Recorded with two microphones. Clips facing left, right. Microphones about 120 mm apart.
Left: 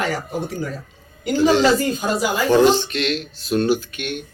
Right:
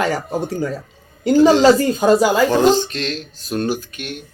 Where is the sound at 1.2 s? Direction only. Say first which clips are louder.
Right 5 dB; 35° right (ahead or behind).